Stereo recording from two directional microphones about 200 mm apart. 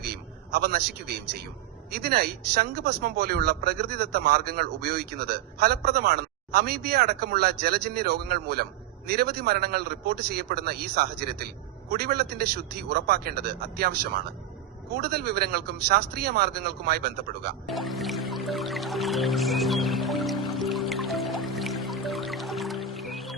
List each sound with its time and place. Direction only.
0.0 s a sound: 50° right (ahead or behind)
1.9 s speech: 55° right (ahead or behind)
17.7 s music: centre (ahead or behind)